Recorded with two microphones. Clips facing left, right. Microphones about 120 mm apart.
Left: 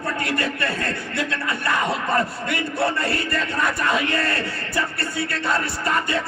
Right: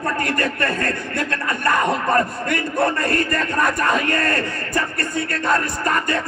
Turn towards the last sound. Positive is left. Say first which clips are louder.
# right 2 dB
turn(degrees=-45)  # may be behind; listen again after turning